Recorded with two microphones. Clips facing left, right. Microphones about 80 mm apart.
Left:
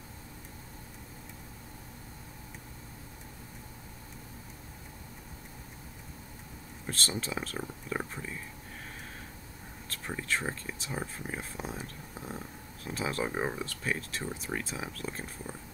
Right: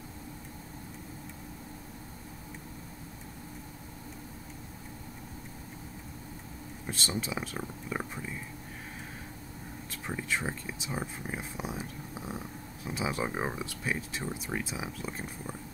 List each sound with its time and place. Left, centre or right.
6.9 s speech: centre
7.5 s speech: centre
9.8 s a sound: centre
10.5 s speech: centre